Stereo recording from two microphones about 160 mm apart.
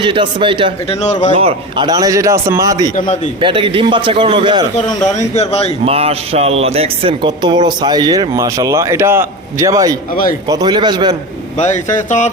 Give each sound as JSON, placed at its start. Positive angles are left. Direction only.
{"t": 0.0, "sound": "a man's voice", "side_deg": -30}
{"t": 0.9, "sound": "speech", "side_deg": 45}
{"t": 1.3, "sound": "speech", "side_deg": -40}
{"t": 2.9, "sound": "speech", "side_deg": 50}
{"t": 3.4, "sound": "a man's voice", "side_deg": -35}
{"t": 4.9, "sound": "speech", "side_deg": 25}
{"t": 5.1, "sound": "speech", "side_deg": 45}
{"t": 5.8, "sound": "speech", "side_deg": -40}
{"t": 11.5, "sound": "speech", "side_deg": 50}